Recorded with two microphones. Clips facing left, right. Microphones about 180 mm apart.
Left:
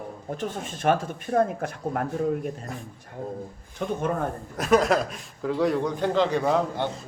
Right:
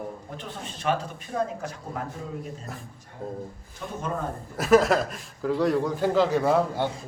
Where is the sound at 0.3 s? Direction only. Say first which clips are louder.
Left 6 dB; 50° left (ahead or behind).